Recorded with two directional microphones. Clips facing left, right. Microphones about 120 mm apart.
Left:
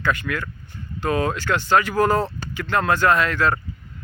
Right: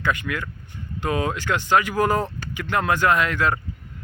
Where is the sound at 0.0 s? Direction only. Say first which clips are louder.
Left 1 dB; 15° right (ahead or behind).